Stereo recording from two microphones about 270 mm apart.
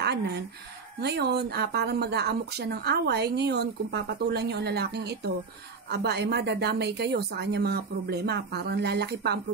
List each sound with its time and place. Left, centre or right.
0.0 s speech: right